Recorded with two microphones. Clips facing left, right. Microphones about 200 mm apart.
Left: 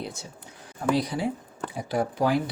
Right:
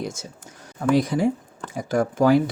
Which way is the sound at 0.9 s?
50° right (ahead or behind).